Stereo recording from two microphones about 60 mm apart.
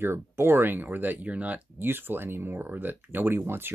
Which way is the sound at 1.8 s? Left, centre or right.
Right.